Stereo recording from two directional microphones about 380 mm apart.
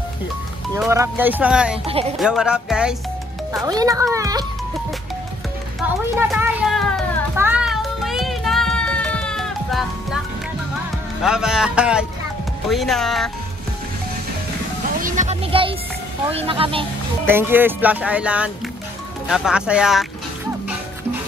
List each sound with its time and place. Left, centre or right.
0.7 s speech: centre
1.9 s speech: centre
2.1 s speech: centre
6.1 s music: centre
11.2 s speech: centre
15.0 s music: centre
16.3 s speech: centre